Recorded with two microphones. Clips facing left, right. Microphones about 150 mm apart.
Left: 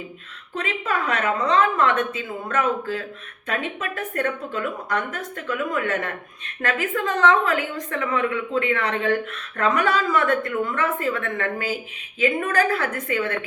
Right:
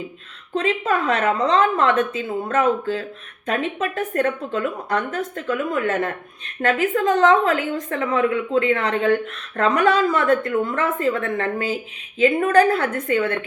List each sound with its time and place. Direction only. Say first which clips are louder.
0.6 s a woman's voice: right 4 dB; 30° right (ahead or behind)